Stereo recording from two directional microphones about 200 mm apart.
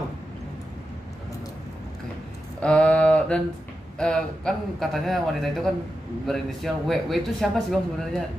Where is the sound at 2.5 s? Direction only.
5° left (ahead or behind).